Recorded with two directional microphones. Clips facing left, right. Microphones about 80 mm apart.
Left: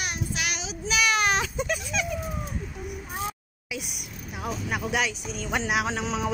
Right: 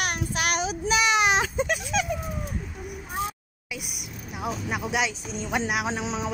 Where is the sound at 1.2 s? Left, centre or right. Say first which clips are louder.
Right 2 dB; centre.